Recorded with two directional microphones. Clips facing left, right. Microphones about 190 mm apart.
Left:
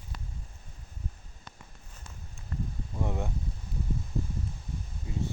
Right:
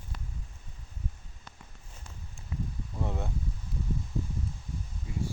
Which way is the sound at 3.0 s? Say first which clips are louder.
Left 2 dB; 15° left (ahead or behind).